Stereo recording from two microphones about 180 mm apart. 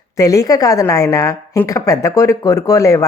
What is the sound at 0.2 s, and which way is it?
Speech, 20° left (ahead or behind).